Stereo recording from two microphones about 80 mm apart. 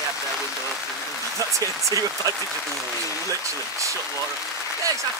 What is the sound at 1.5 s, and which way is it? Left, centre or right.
Speech, right.